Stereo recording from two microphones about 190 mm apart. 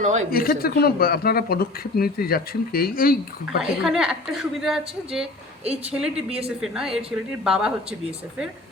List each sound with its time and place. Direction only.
0.3 s speech: 50° left (ahead or behind)
3.6 s a woman's voice: 5° right (ahead or behind)